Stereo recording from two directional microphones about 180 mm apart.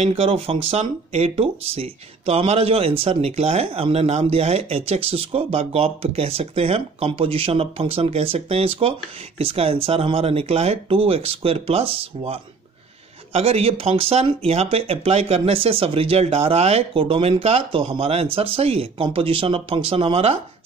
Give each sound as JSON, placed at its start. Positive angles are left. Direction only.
{"t": 0.0, "sound": "speech", "side_deg": -30}